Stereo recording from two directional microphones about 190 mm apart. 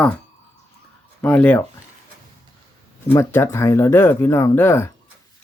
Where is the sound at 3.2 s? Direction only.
10° left (ahead or behind).